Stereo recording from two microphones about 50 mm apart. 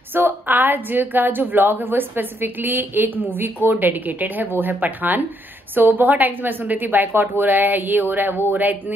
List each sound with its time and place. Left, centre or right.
0.1 s a woman's voice: right